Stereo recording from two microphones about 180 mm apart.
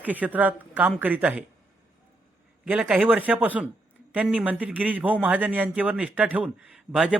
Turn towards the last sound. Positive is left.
turn(degrees=-5)  # may be behind; listen again after turning